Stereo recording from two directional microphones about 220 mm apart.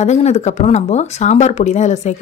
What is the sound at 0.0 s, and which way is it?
Speech, 30° left (ahead or behind).